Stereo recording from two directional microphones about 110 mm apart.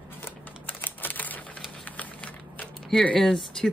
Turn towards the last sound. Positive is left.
turn(degrees=5)  # may be behind; listen again after turning